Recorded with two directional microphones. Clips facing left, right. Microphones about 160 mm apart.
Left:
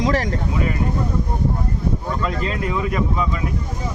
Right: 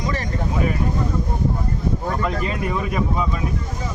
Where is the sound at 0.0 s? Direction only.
90° left.